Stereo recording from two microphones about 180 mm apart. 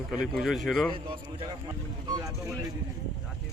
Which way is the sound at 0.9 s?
25° right (ahead or behind).